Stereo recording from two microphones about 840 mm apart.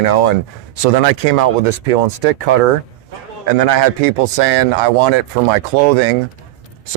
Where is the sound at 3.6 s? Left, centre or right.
Right.